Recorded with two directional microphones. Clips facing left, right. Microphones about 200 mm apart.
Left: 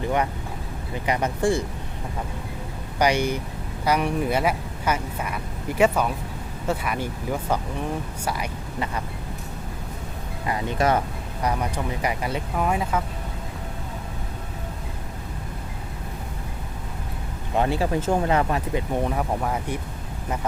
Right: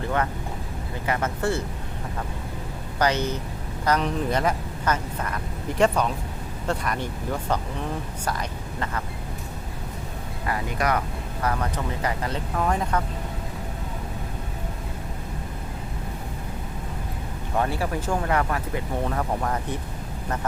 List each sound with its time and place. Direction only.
0.0 s vehicle: 15° left (ahead or behind)
1.0 s speech: 15° left (ahead or behind)
3.0 s speech: 10° left (ahead or behind)
10.4 s speech: 25° left (ahead or behind)
11.4 s speech: 15° left (ahead or behind)
17.5 s speech: 20° left (ahead or behind)
19.1 s speech: 10° left (ahead or behind)